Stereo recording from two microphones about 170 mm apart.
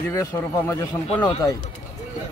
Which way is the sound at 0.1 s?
15° left (ahead or behind).